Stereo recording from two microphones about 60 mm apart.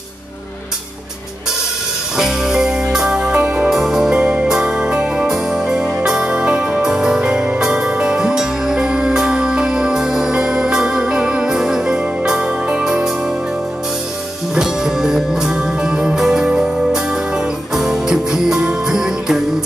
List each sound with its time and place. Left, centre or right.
2.1 s music: centre
3.7 s music: centre
14.5 s music: centre